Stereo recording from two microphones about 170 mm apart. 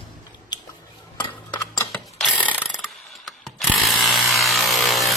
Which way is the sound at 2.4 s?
10° right (ahead or behind).